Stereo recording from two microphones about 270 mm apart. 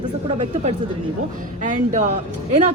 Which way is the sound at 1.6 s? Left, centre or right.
Right.